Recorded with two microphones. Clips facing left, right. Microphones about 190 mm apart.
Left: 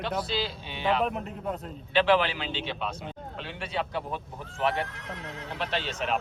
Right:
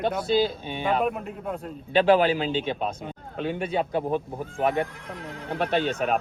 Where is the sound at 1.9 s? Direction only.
45° right (ahead or behind).